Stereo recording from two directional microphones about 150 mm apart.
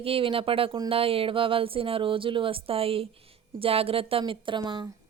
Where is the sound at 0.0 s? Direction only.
40° right (ahead or behind).